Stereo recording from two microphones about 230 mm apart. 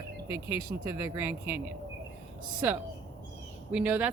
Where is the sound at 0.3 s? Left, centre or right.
Centre.